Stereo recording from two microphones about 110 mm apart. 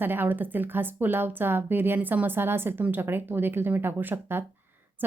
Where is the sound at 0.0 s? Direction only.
15° right (ahead or behind).